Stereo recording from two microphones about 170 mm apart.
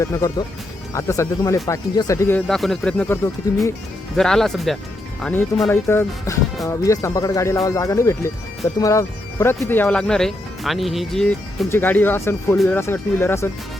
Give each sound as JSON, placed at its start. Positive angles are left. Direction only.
{"t": 0.0, "sound": "speech", "side_deg": 20}
{"t": 2.5, "sound": "speech", "side_deg": 0}
{"t": 4.2, "sound": "speech", "side_deg": 0}
{"t": 5.2, "sound": "speech", "side_deg": 10}